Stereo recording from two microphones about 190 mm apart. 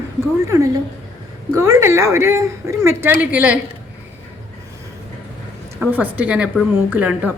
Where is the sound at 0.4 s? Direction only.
15° right (ahead or behind).